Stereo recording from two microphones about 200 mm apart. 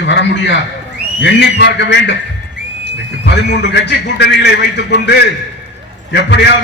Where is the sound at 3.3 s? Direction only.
55° left (ahead or behind).